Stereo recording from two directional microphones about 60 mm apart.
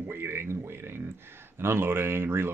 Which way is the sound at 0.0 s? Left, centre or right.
Right.